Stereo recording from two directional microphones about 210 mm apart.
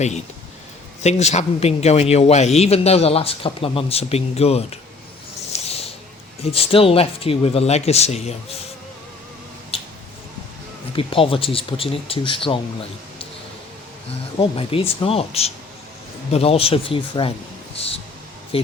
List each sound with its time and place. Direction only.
1.0 s a man's voice: 30° left (ahead or behind)
5.5 s a sound: 30° left (ahead or behind)
6.4 s a man's voice: 25° left (ahead or behind)
10.9 s a man's voice: 25° left (ahead or behind)
14.3 s a man's voice: 25° left (ahead or behind)
17.7 s music: 30° left (ahead or behind)
18.5 s a man's voice: 25° left (ahead or behind)